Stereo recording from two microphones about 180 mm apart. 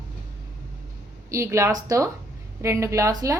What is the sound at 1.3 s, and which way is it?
A woman's voice, 15° right (ahead or behind).